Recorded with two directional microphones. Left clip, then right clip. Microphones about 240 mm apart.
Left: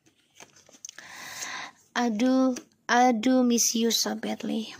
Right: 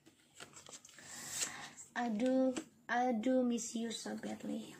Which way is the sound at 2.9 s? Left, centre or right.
Left.